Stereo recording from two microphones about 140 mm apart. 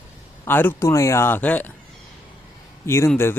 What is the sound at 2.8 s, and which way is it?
Speech, 20° left (ahead or behind).